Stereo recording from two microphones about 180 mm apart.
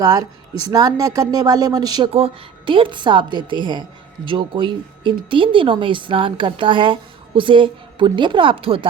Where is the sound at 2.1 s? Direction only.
30° right (ahead or behind).